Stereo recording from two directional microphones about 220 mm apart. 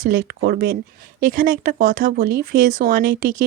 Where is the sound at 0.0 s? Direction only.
40° right (ahead or behind).